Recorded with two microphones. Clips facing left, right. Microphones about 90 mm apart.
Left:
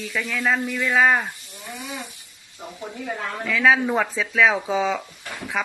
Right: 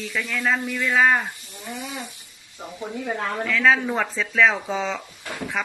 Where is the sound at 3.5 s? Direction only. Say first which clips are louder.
Left 2 dB; 5° left (ahead or behind).